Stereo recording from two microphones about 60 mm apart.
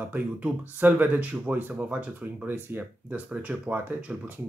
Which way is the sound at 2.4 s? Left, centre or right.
Right.